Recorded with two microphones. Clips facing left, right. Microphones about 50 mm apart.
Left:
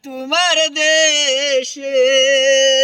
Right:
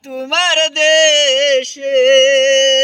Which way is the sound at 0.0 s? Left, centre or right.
Right.